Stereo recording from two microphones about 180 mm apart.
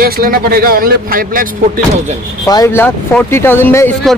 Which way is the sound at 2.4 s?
20° left (ahead or behind).